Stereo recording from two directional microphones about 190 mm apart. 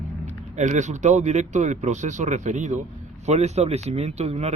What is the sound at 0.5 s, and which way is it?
Speech, 40° right (ahead or behind).